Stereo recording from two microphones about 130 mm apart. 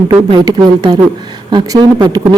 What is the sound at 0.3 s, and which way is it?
A woman's voice, 30° right (ahead or behind).